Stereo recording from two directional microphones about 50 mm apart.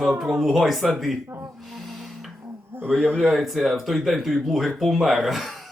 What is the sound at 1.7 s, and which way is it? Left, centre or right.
Gasp, centre.